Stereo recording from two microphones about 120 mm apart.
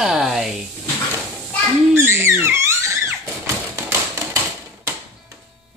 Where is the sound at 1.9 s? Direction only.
20° right (ahead or behind).